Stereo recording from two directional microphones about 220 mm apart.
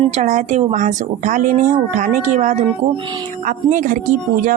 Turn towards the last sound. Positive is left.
turn(degrees=-35)  # may be behind; listen again after turning